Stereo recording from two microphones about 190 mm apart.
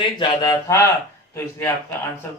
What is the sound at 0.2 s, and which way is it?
A man's voice, 25° left (ahead or behind).